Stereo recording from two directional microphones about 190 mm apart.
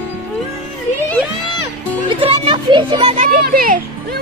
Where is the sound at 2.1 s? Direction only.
25° right (ahead or behind).